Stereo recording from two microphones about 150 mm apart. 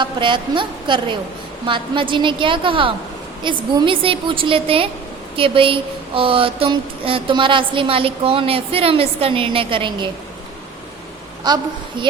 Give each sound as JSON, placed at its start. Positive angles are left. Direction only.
{"t": 0.0, "sound": "speech", "side_deg": -30}
{"t": 11.4, "sound": "a woman's voice", "side_deg": -30}